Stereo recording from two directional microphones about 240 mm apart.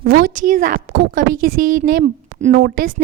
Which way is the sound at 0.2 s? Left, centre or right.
Right.